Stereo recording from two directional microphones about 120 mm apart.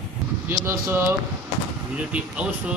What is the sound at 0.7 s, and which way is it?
Speech, 20° right (ahead or behind).